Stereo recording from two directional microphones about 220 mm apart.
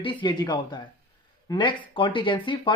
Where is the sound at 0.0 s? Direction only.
20° left (ahead or behind).